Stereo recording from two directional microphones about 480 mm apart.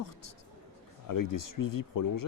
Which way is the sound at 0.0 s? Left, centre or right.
Left.